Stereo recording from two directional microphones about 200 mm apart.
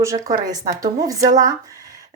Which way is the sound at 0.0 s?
15° right (ahead or behind).